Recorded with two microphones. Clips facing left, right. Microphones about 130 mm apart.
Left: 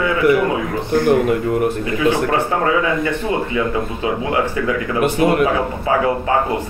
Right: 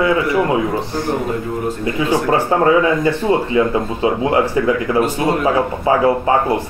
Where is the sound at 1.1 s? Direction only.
65° left (ahead or behind).